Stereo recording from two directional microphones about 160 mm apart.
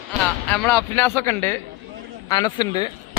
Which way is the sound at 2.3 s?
25° left (ahead or behind).